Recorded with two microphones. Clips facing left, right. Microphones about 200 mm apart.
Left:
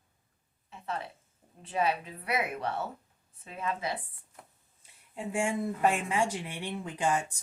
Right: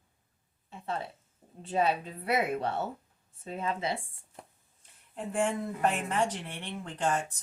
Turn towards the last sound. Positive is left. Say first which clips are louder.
# left 1 dB
turn(degrees=10)  # may be behind; listen again after turning